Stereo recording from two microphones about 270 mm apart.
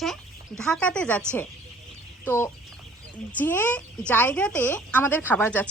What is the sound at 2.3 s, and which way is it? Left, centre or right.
A woman's voice, centre.